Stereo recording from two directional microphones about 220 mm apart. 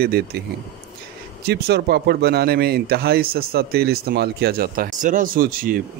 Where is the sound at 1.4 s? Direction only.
45° right (ahead or behind).